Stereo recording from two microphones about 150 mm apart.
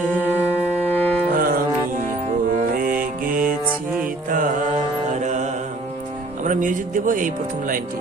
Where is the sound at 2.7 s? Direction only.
70° right (ahead or behind).